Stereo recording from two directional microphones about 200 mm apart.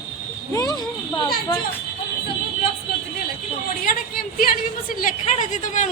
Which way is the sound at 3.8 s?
45° left (ahead or behind).